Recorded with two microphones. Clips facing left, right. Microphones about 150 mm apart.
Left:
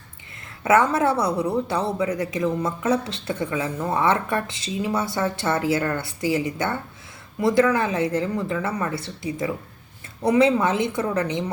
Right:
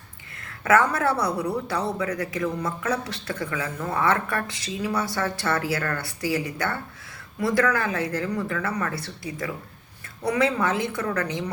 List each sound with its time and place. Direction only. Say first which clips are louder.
0.6 s speech: left 2 dB; 25° left (ahead or behind)